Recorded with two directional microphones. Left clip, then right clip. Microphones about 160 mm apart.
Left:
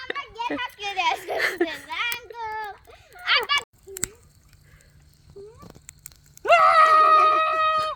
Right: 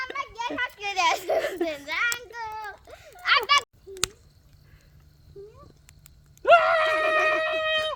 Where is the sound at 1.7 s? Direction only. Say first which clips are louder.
Right 2 dB; 25° right (ahead or behind).